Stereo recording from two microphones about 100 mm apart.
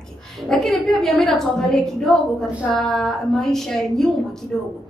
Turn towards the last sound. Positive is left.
turn(degrees=5)  # may be behind; listen again after turning